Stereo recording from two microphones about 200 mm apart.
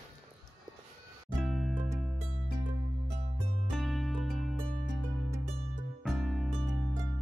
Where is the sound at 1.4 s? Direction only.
Centre (ahead or behind).